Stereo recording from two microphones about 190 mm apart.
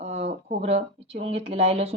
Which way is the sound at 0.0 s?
35° right (ahead or behind).